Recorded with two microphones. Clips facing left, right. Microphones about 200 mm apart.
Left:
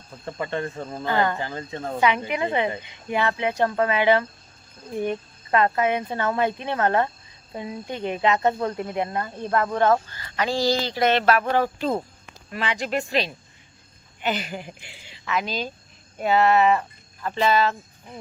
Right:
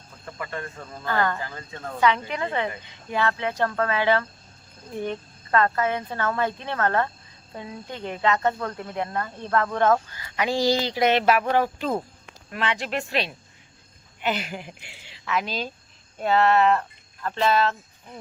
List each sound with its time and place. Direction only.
0.3 s speech: 30° left (ahead or behind)
1.0 s speech: 20° left (ahead or behind)
2.0 s speech: 15° left (ahead or behind)
9.7 s speech: 5° left (ahead or behind)
10.3 s a sound: 20° right (ahead or behind)
12.5 s speech: centre (ahead or behind)